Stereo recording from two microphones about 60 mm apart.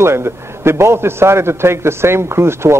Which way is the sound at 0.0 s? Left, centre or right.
Right.